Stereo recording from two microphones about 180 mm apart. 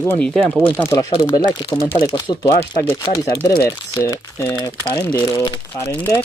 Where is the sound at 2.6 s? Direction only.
15° left (ahead or behind).